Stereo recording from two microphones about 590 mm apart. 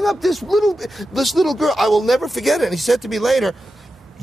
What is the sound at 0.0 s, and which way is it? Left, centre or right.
Speech, centre.